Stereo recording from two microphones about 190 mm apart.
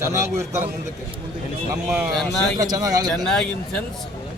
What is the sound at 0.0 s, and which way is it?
Speech, 15° right (ahead or behind).